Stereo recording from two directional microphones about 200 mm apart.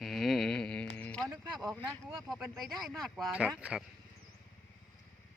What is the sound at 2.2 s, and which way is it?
Speech, centre (ahead or behind).